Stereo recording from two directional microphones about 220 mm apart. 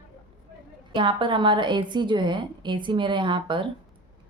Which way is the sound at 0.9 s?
20° right (ahead or behind).